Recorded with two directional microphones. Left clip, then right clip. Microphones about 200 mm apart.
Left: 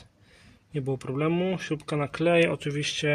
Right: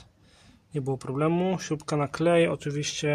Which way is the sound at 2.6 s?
5° left (ahead or behind).